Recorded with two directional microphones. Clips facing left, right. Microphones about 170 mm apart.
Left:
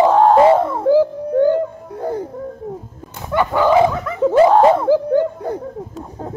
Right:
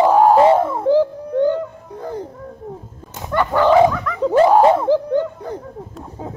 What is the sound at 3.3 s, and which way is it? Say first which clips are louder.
Dog: left 1 dB; 10° left (ahead or behind).